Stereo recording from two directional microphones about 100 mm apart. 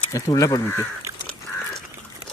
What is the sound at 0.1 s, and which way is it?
Speech, 35° left (ahead or behind).